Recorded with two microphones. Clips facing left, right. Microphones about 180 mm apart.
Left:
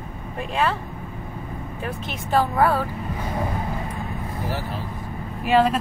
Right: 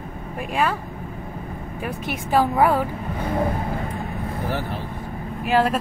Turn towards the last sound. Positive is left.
turn(degrees=0)  # may be behind; listen again after turning